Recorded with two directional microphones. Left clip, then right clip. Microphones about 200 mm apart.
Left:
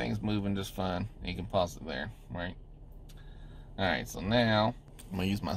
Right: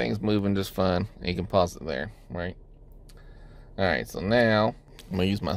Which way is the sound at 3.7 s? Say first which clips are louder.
Right 6 dB; 55° right (ahead or behind).